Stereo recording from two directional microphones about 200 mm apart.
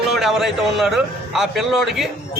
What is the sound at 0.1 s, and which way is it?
A man's voice, centre (ahead or behind).